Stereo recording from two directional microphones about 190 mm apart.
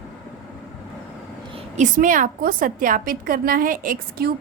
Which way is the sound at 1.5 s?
40° right (ahead or behind).